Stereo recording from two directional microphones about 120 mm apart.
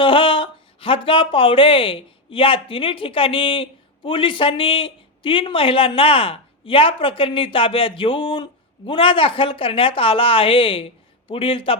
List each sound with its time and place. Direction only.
0.0 s speech: 45° left (ahead or behind)